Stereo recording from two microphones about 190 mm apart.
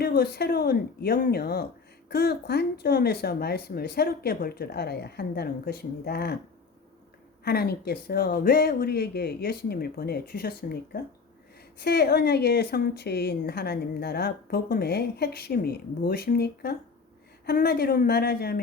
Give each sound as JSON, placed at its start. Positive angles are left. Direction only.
{"t": 0.0, "sound": "speech", "side_deg": 55}
{"t": 7.4, "sound": "speech", "side_deg": 55}